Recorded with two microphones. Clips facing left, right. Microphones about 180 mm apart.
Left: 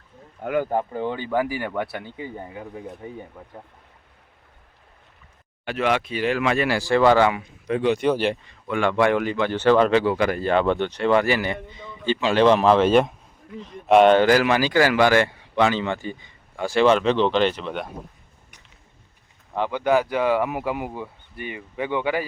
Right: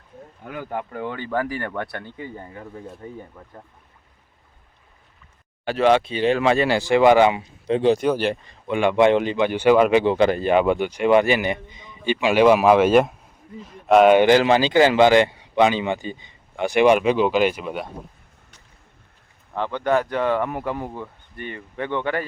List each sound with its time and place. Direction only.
0.6 s speech: 40° left (ahead or behind)
0.9 s speech: 20° left (ahead or behind)
1.3 s speech: 10° left (ahead or behind)
5.6 s speech: 30° right (ahead or behind)
8.6 s speech: 20° right (ahead or behind)
10.5 s speech: 10° right (ahead or behind)
14.1 s speech: 20° right (ahead or behind)
19.5 s speech: 10° left (ahead or behind)